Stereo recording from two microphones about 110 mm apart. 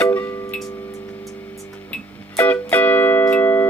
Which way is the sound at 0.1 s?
15° left (ahead or behind).